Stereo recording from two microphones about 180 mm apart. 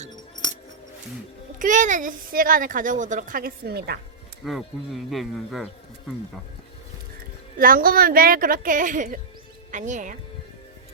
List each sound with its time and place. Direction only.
1.5 s speech: 45° right (ahead or behind); by 4.0 s 65° right (ahead or behind)
4.4 s speech: centre (ahead or behind)
7.6 s speech: 55° right (ahead or behind)